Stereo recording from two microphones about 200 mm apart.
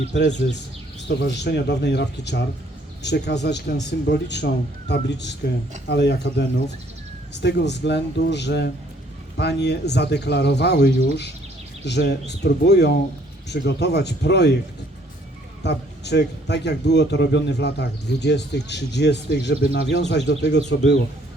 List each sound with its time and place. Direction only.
0.1 s a man's voice: 60° left (ahead or behind)
7.4 s a man's voice: 60° left (ahead or behind)
15.6 s a man's voice: 60° left (ahead or behind)